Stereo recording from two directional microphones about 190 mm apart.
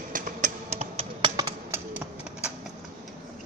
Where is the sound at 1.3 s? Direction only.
15° right (ahead or behind).